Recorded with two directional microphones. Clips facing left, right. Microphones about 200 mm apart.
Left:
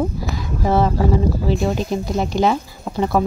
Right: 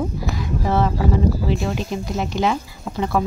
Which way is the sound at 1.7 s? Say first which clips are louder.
Left 4 dB; 40° left (ahead or behind).